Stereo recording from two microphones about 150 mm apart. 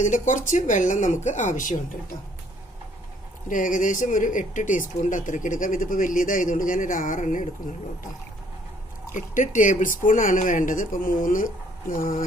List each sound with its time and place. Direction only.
0.0 s speech: 55° left (ahead or behind)
3.5 s speech: 60° left (ahead or behind)
9.1 s speech: 55° left (ahead or behind)